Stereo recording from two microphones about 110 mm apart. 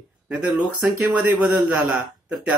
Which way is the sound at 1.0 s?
10° right (ahead or behind).